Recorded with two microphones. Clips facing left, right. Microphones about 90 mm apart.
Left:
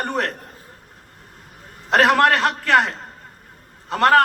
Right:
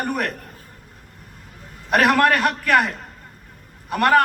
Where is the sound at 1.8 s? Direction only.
25° left (ahead or behind).